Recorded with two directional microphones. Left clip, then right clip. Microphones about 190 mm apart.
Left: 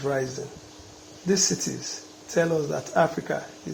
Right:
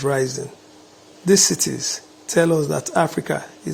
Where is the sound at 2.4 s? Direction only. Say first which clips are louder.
Right 6 dB; 60° right (ahead or behind).